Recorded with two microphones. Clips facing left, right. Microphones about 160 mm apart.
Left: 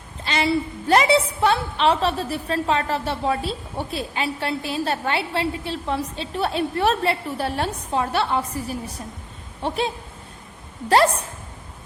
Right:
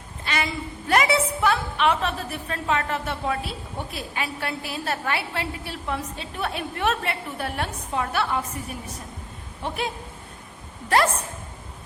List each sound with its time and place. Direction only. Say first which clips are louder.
0.3 s a woman's voice: left 6 dB; 30° left (ahead or behind)